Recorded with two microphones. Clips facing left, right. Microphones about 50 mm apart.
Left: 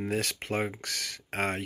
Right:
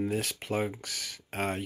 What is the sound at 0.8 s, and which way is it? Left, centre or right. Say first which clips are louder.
Speech: left 3 dB; left.